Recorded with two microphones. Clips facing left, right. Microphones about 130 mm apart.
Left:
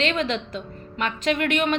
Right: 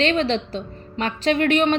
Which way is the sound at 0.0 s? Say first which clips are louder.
Right 4 dB; 35° right (ahead or behind).